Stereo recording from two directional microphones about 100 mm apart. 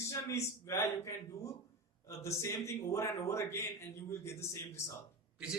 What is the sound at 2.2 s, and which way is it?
A man's voice, 30° left (ahead or behind).